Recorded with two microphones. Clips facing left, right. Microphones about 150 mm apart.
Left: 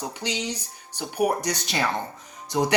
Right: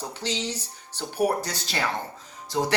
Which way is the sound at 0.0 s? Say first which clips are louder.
Left 1 dB; 15° left (ahead or behind).